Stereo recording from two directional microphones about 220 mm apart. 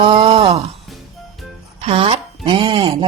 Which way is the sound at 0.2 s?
25° right (ahead or behind).